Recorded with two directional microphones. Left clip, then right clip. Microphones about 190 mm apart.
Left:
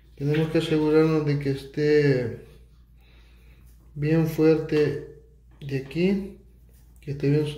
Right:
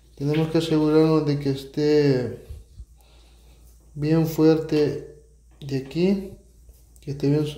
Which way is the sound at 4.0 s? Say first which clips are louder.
Right 2 dB; 20° right (ahead or behind).